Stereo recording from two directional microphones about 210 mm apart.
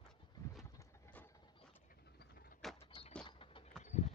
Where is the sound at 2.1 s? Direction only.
45° left (ahead or behind).